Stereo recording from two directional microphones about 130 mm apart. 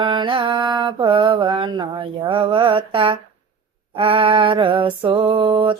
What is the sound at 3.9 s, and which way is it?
Mantra, 45° right (ahead or behind).